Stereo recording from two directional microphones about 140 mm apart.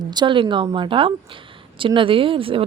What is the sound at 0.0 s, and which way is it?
A woman's voice, 30° right (ahead or behind).